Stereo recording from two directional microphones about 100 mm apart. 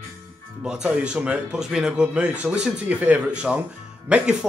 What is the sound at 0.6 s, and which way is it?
Speech, 10° right (ahead or behind).